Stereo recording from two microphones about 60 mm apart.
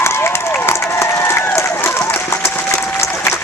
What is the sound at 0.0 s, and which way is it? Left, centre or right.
Crowd, left.